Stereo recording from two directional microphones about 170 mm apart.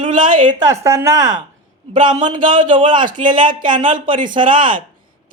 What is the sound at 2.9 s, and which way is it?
Speech, 50° right (ahead or behind).